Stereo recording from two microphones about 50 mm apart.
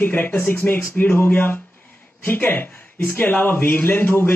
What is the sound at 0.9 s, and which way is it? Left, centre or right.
A man's voice, left.